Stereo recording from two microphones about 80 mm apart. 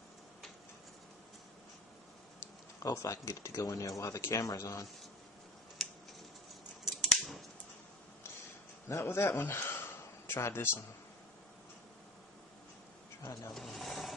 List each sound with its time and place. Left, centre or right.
2.8 s speech: left
5.8 s scissors: centre
8.8 s a man's voice: left
13.2 s speech: left
13.5 s speech: centre